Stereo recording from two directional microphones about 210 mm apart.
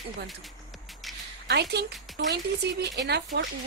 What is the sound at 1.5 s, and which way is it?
Speech, 50° right (ahead or behind).